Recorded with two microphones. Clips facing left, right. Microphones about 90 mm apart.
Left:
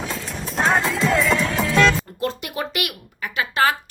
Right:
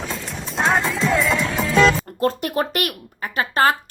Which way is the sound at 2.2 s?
45° right (ahead or behind).